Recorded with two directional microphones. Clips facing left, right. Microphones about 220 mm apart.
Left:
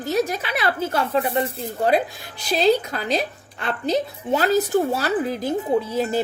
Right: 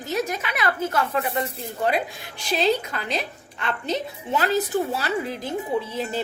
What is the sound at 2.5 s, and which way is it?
A woman's voice, 40° left (ahead or behind).